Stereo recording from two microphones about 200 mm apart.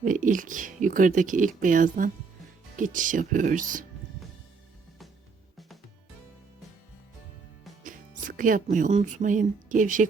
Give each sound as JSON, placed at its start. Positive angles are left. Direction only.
{"t": 0.0, "sound": "speech", "side_deg": -40}
{"t": 7.9, "sound": "music", "side_deg": -40}
{"t": 8.7, "sound": "speech", "side_deg": -40}